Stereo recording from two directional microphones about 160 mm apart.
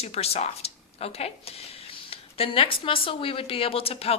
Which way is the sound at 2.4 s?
35° left (ahead or behind).